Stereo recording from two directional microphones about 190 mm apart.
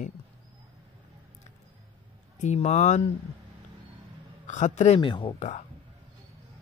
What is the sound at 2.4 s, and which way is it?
Speech, 40° left (ahead or behind).